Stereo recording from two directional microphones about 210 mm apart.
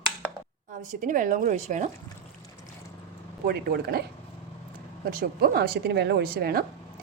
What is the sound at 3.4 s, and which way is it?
Speech, 50° right (ahead or behind).